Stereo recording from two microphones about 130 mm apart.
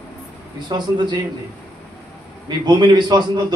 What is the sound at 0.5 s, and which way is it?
Speech, 35° right (ahead or behind).